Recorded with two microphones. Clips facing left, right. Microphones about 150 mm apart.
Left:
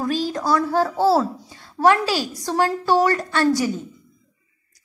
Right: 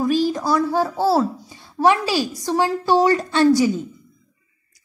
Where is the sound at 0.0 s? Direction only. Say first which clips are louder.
Right 4 dB; 10° right (ahead or behind).